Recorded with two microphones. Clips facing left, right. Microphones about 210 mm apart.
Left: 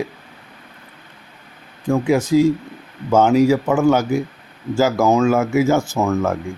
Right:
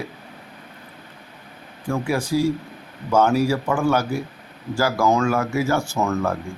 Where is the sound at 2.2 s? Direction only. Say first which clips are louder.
Left 5 dB; 10° right (ahead or behind).